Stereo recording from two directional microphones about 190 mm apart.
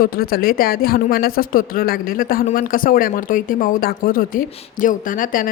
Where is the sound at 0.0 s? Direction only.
50° left (ahead or behind).